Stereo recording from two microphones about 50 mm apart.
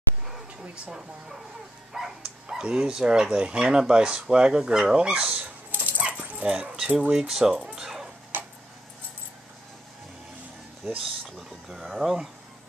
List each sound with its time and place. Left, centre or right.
0.7 s speech: centre
5.7 s dog: right
6.0 s dog: right
6.9 s speech: right
7.2 s speech: centre
7.6 s dog: centre
8.3 s a sound: right
11.7 s speech: centre